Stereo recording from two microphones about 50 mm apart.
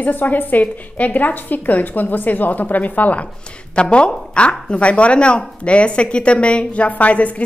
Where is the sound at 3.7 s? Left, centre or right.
Left.